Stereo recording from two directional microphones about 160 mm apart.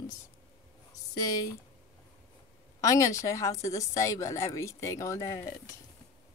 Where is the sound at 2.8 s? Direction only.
20° left (ahead or behind).